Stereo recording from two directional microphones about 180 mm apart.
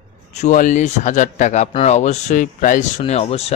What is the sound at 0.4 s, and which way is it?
A man's voice, 45° left (ahead or behind).